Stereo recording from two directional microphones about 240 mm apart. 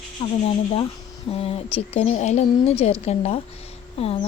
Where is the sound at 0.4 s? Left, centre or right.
Left.